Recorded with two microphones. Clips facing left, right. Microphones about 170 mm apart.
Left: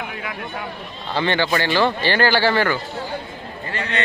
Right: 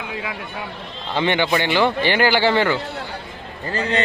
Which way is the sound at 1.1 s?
20° right (ahead or behind).